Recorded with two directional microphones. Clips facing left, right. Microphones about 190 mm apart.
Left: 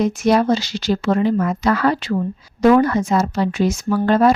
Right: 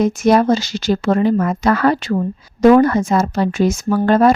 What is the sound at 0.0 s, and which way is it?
A woman's voice, 45° right (ahead or behind).